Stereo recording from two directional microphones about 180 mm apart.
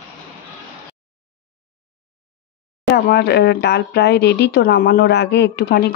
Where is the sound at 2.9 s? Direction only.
65° left (ahead or behind).